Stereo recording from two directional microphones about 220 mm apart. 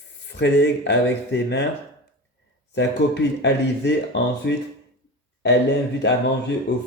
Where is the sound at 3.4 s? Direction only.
50° left (ahead or behind).